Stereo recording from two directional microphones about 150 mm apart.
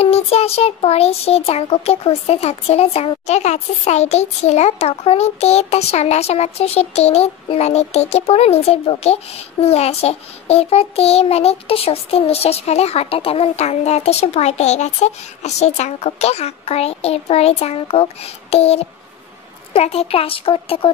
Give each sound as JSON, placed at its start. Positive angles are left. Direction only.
{"t": 0.0, "sound": "child singing", "side_deg": 45}
{"t": 19.7, "sound": "speech", "side_deg": 40}